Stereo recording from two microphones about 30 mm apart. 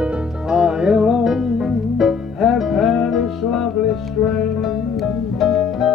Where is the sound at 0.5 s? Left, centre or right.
Right.